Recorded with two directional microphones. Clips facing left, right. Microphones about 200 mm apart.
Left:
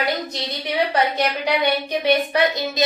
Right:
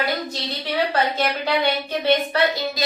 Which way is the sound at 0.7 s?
15° left (ahead or behind).